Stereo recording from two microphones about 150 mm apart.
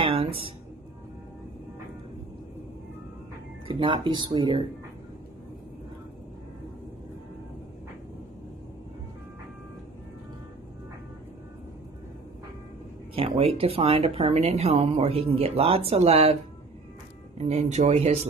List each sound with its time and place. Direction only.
0.0 s music: 40° right (ahead or behind)
3.6 s speech: 35° right (ahead or behind)
13.1 s speech: 35° right (ahead or behind)
17.4 s speech: 50° right (ahead or behind)